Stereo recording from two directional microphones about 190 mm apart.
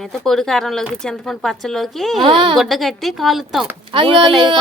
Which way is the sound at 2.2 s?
25° right (ahead or behind).